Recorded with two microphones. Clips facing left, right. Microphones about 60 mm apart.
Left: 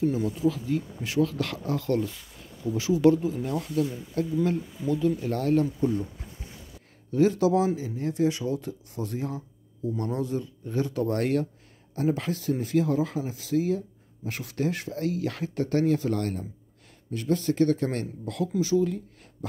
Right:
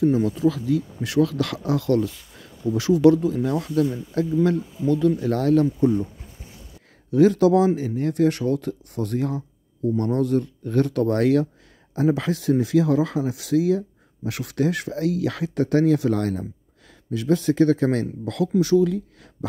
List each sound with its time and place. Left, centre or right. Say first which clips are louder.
0.0 s speech: right 6 dB; right
2.7 s speech: right 6 dB; right
3.1 s speech: right 4 dB; right
7.1 s speech: right 6 dB; right
17.2 s speech: right 5 dB; right
18.6 s speech: right 6 dB; right